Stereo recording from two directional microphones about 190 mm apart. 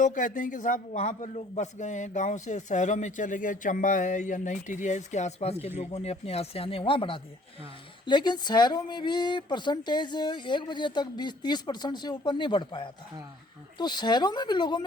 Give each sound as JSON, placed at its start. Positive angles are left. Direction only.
{"t": 0.0, "sound": "a man's voice", "side_deg": 40}